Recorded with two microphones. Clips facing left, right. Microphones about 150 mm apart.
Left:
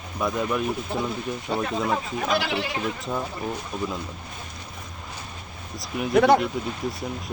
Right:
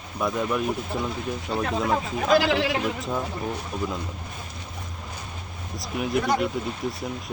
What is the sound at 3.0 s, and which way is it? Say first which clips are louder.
Speech: right 1 dB; centre (ahead or behind).